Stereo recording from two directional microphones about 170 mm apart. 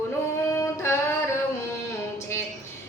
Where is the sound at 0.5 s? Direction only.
15° left (ahead or behind).